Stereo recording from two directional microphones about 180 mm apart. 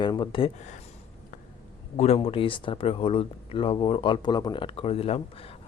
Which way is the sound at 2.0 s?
35° left (ahead or behind).